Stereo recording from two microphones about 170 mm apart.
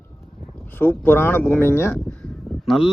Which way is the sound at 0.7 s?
10° left (ahead or behind).